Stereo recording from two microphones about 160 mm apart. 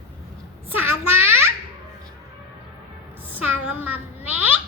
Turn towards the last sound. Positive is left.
turn(degrees=-10)  # may be behind; listen again after turning